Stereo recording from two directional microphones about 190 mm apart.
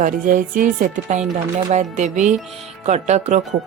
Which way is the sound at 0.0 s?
45° right (ahead or behind).